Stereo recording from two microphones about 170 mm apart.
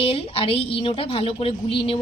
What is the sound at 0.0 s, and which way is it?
A woman's voice, 35° left (ahead or behind).